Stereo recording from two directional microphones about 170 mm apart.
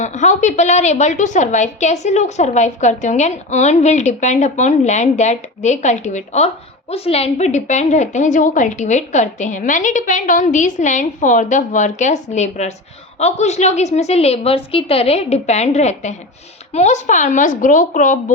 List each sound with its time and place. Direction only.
0.0 s a woman's voice: 45° left (ahead or behind)